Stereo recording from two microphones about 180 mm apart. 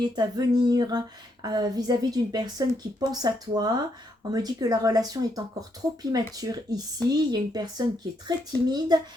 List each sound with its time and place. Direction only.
0.0 s speech: 20° right (ahead or behind)